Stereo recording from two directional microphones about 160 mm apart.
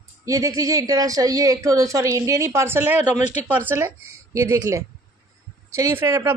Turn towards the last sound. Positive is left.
turn(degrees=-15)  # may be behind; listen again after turning